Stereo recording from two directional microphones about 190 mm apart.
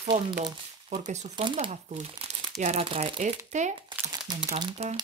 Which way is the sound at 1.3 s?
25° right (ahead or behind).